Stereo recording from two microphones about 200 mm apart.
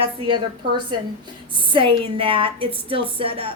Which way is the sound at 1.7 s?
25° right (ahead or behind).